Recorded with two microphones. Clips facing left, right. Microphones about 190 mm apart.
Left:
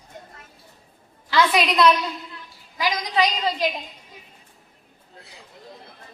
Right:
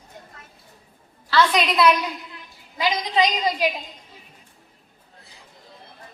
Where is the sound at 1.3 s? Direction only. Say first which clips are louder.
Even; 10° left (ahead or behind); by 2.4 s 10° right (ahead or behind).